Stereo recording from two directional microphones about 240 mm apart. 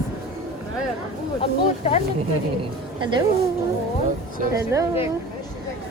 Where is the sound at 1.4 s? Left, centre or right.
Left.